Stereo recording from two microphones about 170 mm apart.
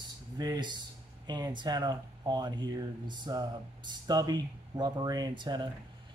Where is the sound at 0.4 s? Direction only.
25° right (ahead or behind).